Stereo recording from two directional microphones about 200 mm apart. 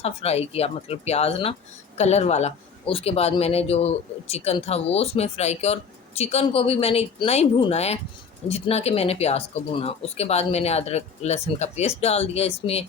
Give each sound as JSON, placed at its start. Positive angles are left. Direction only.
{"t": 0.0, "sound": "speech", "side_deg": 30}